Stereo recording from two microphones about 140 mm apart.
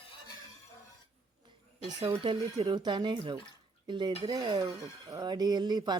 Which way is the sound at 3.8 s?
35° right (ahead or behind).